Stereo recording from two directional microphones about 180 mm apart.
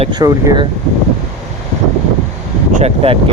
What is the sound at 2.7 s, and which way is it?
Speech, 35° right (ahead or behind).